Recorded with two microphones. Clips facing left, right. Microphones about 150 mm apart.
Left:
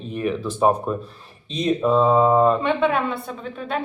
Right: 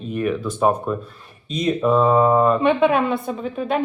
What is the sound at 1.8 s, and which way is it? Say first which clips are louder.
A woman's voice: right 1 dB; centre (ahead or behind).